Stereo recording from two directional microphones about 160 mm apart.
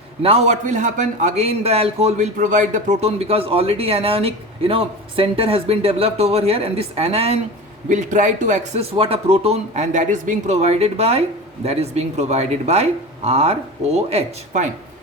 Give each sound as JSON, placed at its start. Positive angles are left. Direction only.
{"t": 0.2, "sound": "a man's voice", "side_deg": -40}
{"t": 7.9, "sound": "a man's voice", "side_deg": -50}